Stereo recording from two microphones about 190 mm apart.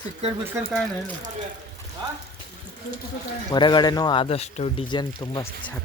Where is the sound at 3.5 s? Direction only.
25° left (ahead or behind).